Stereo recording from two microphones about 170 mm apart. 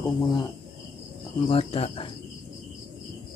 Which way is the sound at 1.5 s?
35° left (ahead or behind).